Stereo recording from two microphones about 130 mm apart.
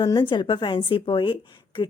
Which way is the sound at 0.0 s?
35° left (ahead or behind).